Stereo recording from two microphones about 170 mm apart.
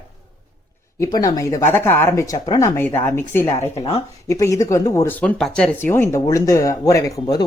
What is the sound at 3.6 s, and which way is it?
Speech, 35° left (ahead or behind).